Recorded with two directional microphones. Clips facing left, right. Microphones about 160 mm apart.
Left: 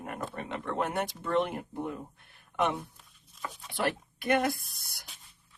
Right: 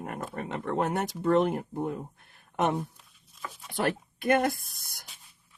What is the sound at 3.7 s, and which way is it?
Speech, 50° right (ahead or behind).